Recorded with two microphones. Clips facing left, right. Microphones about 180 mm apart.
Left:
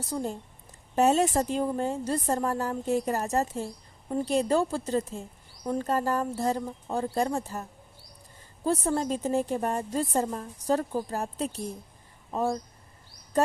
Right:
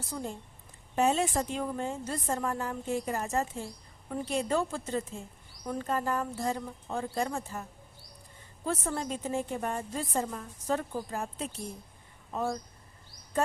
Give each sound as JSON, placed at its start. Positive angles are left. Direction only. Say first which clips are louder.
{"t": 0.1, "sound": "a woman's voice", "louder": "left 6 dB", "side_deg": 40}
{"t": 8.6, "sound": "a woman's voice", "louder": "left 6 dB", "side_deg": 35}